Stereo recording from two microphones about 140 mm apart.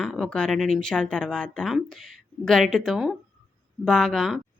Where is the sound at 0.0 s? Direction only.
5° left (ahead or behind).